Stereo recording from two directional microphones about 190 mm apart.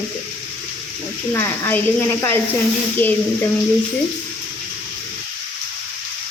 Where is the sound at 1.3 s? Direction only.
10° left (ahead or behind).